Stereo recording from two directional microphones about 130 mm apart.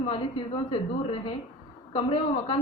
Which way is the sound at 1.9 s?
40° left (ahead or behind).